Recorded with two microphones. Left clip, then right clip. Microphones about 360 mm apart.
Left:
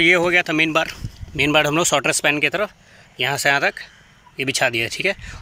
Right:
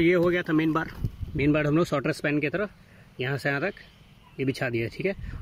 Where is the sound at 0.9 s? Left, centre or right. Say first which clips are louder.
Left 8 dB; left.